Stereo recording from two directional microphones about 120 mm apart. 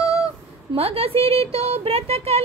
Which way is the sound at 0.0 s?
30° left (ahead or behind).